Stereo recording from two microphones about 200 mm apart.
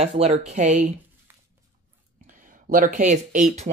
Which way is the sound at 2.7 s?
40° right (ahead or behind).